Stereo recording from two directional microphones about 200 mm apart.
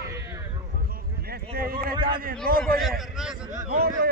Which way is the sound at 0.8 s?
50° right (ahead or behind).